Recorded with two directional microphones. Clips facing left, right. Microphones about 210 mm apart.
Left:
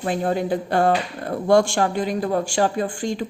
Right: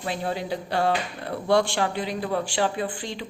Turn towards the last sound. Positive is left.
turn(degrees=45)  # may be behind; listen again after turning